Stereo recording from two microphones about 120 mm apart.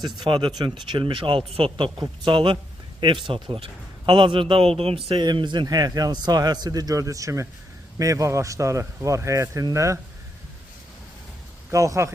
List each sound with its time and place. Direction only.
0.0 s a man's voice: 35° right (ahead or behind); by 4.9 s 55° right (ahead or behind)
5.0 s a man's voice: 35° right (ahead or behind)
11.7 s a man's voice: 25° right (ahead or behind)